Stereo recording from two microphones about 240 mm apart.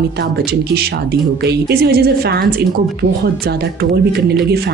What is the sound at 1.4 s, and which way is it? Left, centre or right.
A woman's voice, right.